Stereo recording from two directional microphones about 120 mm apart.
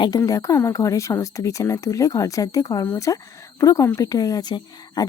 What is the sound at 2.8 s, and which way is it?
Speech, 20° left (ahead or behind).